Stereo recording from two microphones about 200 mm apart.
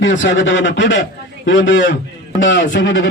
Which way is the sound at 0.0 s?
70° left (ahead or behind).